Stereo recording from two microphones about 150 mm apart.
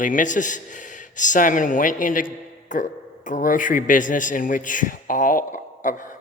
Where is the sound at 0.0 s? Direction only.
60° left (ahead or behind).